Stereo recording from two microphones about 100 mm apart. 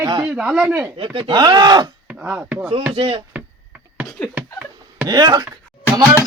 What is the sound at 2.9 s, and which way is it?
Speech, 65° right (ahead or behind).